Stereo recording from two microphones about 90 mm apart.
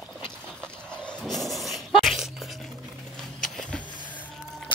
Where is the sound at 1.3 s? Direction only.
Centre (ahead or behind).